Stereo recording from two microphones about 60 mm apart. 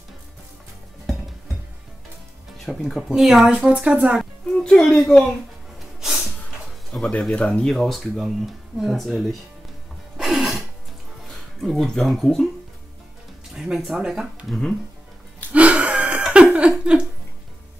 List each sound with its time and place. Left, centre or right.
2.6 s speech: centre
3.0 s speech: centre
3.5 s speech: centre
4.5 s a child's voice: centre
6.9 s a child's voice: left
7.6 s speech: centre
10.1 s music: centre
11.2 s speech: centre
13.6 s speech: centre
15.5 s a sound: right